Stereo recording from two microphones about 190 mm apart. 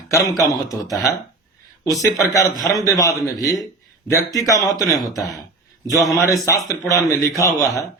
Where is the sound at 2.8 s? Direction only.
20° left (ahead or behind).